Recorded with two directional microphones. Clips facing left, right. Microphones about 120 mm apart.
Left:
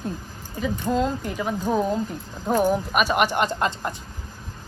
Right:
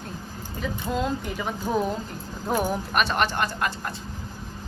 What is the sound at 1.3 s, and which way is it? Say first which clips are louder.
Speech: left 4 dB; 5° right (ahead or behind).